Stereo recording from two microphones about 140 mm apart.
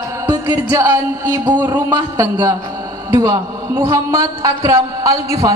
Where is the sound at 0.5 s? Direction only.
30° right (ahead or behind).